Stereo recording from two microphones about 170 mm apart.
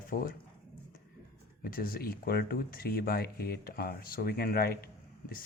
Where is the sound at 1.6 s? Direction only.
60° left (ahead or behind).